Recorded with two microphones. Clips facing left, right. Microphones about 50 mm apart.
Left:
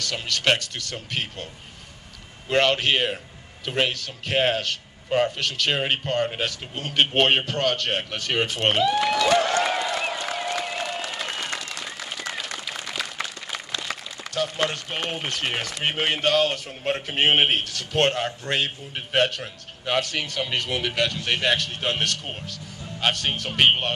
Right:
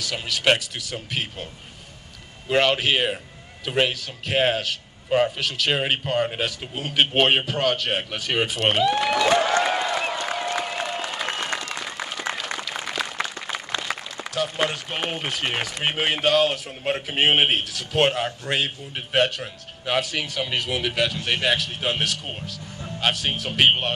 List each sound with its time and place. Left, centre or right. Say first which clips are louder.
0.0 s a man's voice: right 1 dB; centre
2.5 s a man's voice: right 1 dB; centre
9.1 s a sound: right 1 dB; centre
10.9 s applause: right 2 dB; centre
11.5 s applause: right 3 dB; right
12.7 s a sound: right 3 dB; right
14.2 s a man's voice: right 1 dB; centre